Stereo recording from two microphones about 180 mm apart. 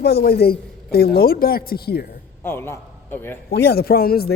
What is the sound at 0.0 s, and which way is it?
Speech, 60° left (ahead or behind).